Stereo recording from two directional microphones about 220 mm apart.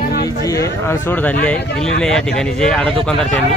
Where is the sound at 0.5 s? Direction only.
15° left (ahead or behind).